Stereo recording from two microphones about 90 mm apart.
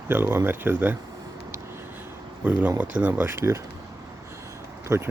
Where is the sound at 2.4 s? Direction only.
20° right (ahead or behind).